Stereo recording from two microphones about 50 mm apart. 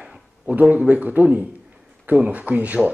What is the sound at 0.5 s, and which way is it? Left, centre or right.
Speech, right.